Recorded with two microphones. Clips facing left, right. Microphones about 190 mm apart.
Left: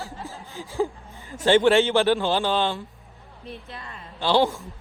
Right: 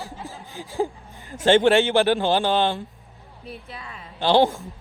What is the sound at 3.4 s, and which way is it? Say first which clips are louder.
Speech: even; centre (ahead or behind).